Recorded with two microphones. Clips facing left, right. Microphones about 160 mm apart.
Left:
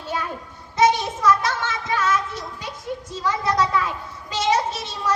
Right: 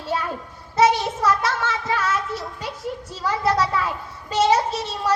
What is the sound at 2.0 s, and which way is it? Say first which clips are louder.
Child singing: left 1 dB; 30° right (ahead or behind).